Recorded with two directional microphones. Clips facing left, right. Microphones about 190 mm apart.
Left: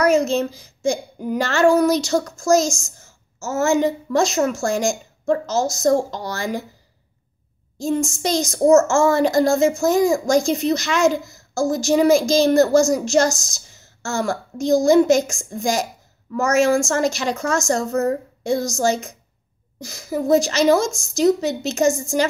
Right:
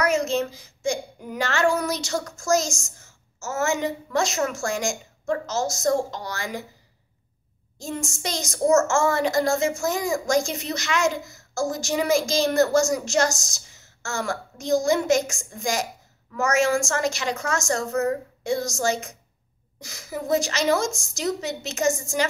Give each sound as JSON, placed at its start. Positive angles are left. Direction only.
{"t": 0.0, "sound": "a child's voice", "side_deg": 35}
{"t": 7.8, "sound": "a child's voice", "side_deg": 35}